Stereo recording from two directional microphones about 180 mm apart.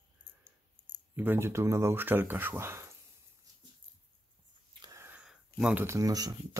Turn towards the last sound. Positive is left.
turn(degrees=-20)  # may be behind; listen again after turning